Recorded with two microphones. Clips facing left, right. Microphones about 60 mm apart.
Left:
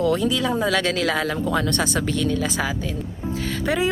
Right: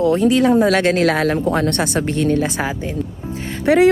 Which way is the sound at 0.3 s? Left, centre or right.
Right.